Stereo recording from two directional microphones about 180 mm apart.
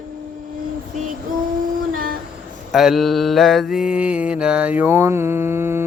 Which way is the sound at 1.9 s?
50° right (ahead or behind).